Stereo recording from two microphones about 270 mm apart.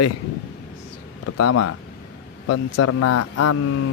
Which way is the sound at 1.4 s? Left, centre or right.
Left.